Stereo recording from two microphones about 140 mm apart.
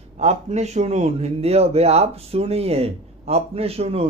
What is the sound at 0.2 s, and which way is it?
Speech, 50° right (ahead or behind).